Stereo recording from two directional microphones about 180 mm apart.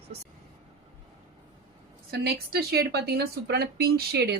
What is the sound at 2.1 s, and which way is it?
A woman's voice, 65° right (ahead or behind).